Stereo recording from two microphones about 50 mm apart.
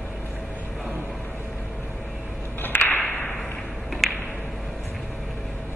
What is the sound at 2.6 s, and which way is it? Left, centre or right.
Whip, left.